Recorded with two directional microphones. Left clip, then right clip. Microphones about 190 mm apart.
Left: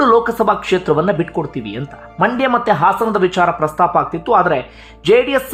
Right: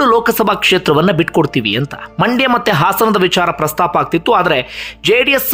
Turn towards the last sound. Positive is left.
turn(degrees=-15)  # may be behind; listen again after turning